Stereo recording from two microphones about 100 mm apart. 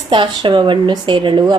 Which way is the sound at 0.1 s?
55° right (ahead or behind).